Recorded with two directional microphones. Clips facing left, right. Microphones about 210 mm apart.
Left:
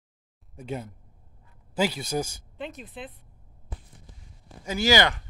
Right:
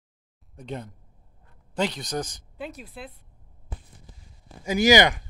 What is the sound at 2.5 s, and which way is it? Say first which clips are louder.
Speech: right 2 dB; centre (ahead or behind).